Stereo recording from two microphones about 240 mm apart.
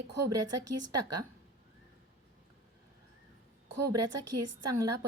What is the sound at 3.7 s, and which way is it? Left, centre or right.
Speech, right.